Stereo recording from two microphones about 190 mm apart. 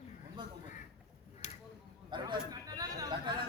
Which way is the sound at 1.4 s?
40° left (ahead or behind).